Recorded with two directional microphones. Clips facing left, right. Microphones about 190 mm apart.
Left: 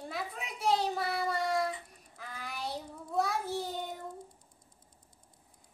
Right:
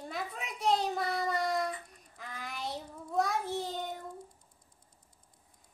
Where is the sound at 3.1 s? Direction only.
5° left (ahead or behind).